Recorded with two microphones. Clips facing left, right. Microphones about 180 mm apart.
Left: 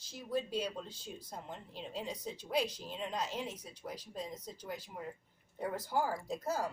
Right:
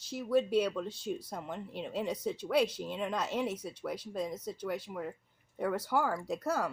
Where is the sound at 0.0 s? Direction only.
65° right (ahead or behind).